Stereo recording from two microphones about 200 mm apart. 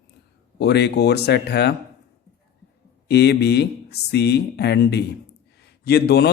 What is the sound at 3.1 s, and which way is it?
A man's voice, 55° left (ahead or behind).